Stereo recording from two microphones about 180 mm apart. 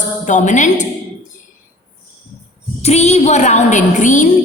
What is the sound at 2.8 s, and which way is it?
A woman's voice, 35° left (ahead or behind).